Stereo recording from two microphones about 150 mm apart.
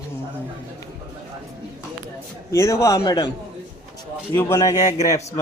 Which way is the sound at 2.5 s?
20° left (ahead or behind).